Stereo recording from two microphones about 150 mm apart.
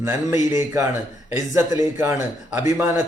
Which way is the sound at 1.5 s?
20° right (ahead or behind).